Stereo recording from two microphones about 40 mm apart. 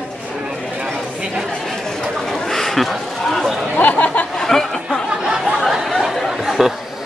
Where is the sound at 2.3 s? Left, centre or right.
Centre.